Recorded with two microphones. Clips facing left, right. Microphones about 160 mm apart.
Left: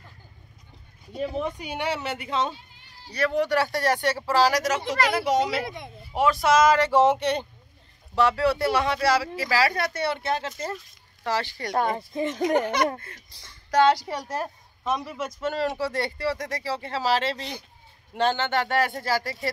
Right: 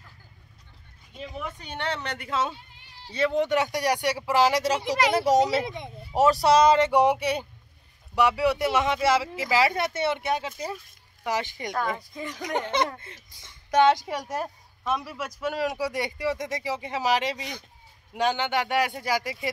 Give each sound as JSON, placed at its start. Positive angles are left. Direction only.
{"t": 1.1, "sound": "speech", "side_deg": 40}
{"t": 1.5, "sound": "a woman's voice", "side_deg": 10}
{"t": 3.1, "sound": "speech", "side_deg": -20}
{"t": 6.1, "sound": "speech", "side_deg": -35}
{"t": 6.9, "sound": "speech", "side_deg": -15}
{"t": 11.7, "sound": "speech", "side_deg": 30}
{"t": 12.5, "sound": "speech", "side_deg": -25}
{"t": 15.0, "sound": "a man's voice", "side_deg": -5}